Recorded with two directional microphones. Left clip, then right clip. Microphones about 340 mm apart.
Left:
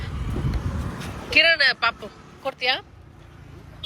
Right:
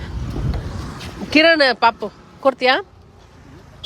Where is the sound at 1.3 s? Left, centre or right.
Centre.